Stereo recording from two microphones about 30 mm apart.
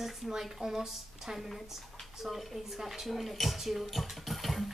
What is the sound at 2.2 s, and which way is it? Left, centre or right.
Speech, centre.